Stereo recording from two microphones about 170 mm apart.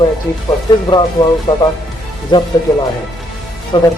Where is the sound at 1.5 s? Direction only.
15° left (ahead or behind).